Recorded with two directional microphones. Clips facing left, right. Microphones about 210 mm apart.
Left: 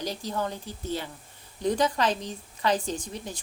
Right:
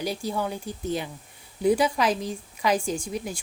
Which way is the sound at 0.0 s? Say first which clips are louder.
Right 3 dB; 10° right (ahead or behind).